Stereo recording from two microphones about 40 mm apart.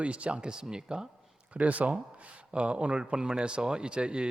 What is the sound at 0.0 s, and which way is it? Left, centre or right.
Speech, right.